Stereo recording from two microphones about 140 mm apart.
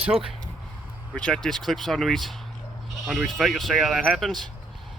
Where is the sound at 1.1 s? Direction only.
5° left (ahead or behind).